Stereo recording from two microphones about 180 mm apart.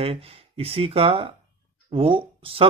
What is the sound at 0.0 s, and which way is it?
Speech, 30° right (ahead or behind).